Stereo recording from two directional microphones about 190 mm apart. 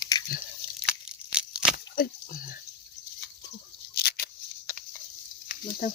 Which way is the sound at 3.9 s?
55° left (ahead or behind).